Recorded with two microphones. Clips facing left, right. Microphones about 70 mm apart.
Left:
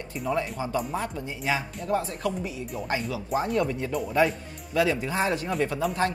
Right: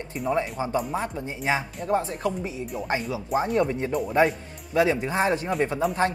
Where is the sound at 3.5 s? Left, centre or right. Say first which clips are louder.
Right 3 dB; right.